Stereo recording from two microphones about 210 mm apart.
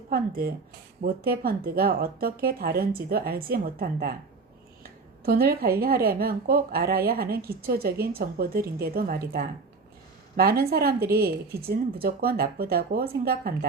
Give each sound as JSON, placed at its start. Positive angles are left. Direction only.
{"t": 0.1, "sound": "speech", "side_deg": -45}